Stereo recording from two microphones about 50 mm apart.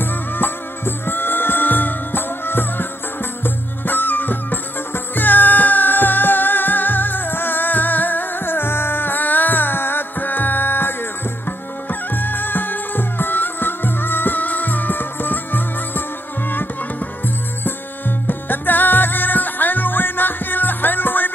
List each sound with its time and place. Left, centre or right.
0.0 s music: left
16.4 s tabla: left
17.6 s music: left